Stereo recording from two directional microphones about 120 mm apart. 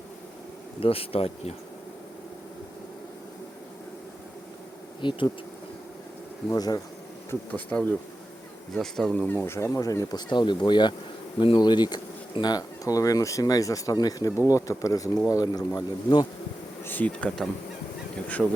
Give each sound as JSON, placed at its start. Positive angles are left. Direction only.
{"t": 0.8, "sound": "speech", "side_deg": 50}
{"t": 4.9, "sound": "speech", "side_deg": 40}
{"t": 6.5, "sound": "speech", "side_deg": 30}
{"t": 7.3, "sound": "speech", "side_deg": 10}
{"t": 9.2, "sound": "speech", "side_deg": 20}
{"t": 16.8, "sound": "speech", "side_deg": 15}